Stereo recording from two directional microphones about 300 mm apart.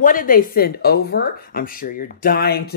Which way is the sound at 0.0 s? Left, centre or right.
Left.